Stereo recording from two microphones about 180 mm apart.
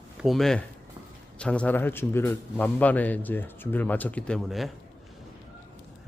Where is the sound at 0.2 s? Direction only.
Centre (ahead or behind).